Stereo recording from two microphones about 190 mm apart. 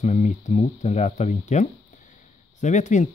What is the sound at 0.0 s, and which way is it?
Speech, 40° left (ahead or behind).